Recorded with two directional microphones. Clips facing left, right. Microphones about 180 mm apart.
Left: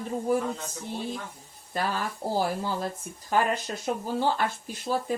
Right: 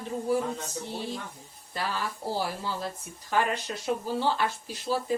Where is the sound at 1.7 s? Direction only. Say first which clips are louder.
Left 3 dB; 50° left (ahead or behind).